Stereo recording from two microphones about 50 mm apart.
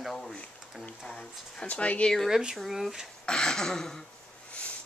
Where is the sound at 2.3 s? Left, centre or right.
Centre.